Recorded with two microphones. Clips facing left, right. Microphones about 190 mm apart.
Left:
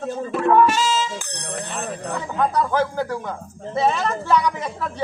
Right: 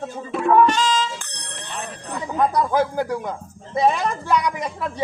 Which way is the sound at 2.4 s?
10° right (ahead or behind).